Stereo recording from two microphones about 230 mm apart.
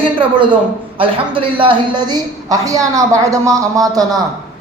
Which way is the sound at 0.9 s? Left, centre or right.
Right.